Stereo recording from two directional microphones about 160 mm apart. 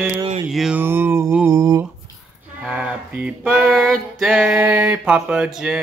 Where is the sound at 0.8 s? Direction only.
15° right (ahead or behind).